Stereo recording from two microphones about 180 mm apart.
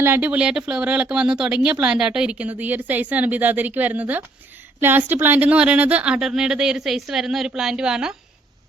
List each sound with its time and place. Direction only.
0.0 s speech: 10° right (ahead or behind)